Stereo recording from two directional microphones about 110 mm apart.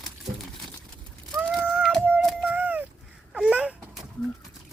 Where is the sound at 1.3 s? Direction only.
10° right (ahead or behind).